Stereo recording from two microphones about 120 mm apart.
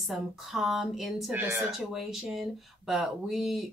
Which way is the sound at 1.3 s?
15° right (ahead or behind).